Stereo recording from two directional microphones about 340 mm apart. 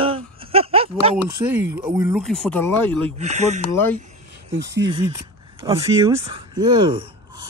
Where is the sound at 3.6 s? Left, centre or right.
Centre.